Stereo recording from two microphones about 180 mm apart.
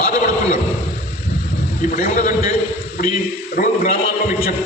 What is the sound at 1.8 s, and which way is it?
A man's voice, 45° left (ahead or behind).